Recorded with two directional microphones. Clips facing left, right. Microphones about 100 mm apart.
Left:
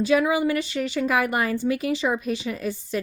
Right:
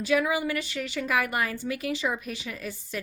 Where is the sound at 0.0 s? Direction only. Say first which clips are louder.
Left 5 dB; 25° left (ahead or behind).